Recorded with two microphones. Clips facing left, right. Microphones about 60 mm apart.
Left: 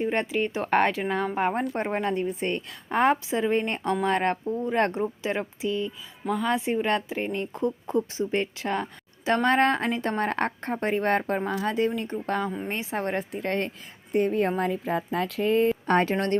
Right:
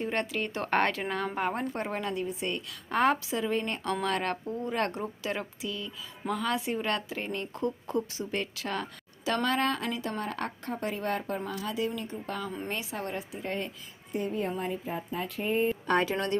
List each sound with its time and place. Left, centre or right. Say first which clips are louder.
0.0 s a woman's voice: left 5 dB; left
1.4 s speech: left 5 dB; left
2.9 s speech: left 4 dB; left
12.6 s speech: left 5 dB; left
13.1 s a woman's voice: left 6 dB; left
15.9 s speech: left 4 dB; left